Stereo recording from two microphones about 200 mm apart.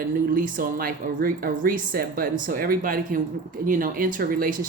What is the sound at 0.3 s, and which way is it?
Speech, 40° right (ahead or behind).